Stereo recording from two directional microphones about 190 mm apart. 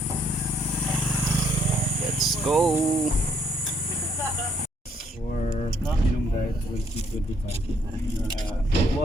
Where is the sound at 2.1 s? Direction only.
Centre (ahead or behind).